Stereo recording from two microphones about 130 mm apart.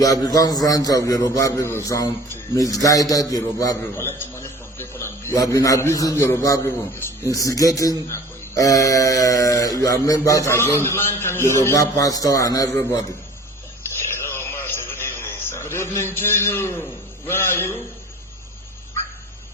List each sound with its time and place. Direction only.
0.0 s a man's voice: 30° left (ahead or behind)
14.0 s a sound: 20° left (ahead or behind)
17.2 s a man's voice: 20° left (ahead or behind)